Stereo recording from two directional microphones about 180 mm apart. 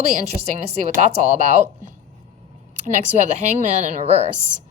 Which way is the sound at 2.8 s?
40° right (ahead or behind).